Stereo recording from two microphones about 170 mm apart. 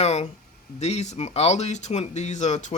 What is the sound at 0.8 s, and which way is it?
Speech, 40° left (ahead or behind).